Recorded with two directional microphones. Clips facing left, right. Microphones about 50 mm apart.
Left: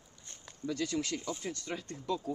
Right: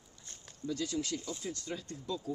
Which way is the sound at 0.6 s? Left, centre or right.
Left.